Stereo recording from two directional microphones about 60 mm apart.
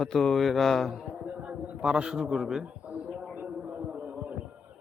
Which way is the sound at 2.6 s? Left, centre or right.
Centre.